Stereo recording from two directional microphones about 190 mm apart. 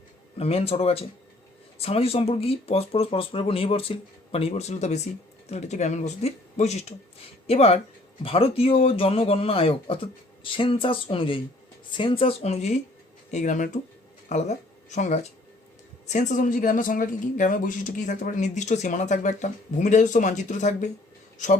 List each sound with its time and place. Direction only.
0.3 s speech: 30° left (ahead or behind)